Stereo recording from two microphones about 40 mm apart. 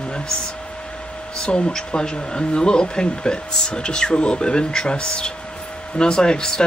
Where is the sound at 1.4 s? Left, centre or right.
Left.